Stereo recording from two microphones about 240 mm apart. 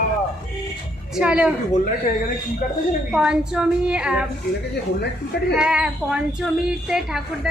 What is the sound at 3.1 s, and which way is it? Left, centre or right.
A woman's voice, centre.